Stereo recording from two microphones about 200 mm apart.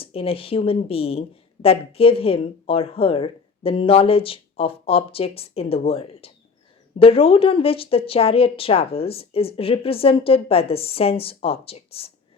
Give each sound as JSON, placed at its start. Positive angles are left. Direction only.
{"t": 0.0, "sound": "speech", "side_deg": 30}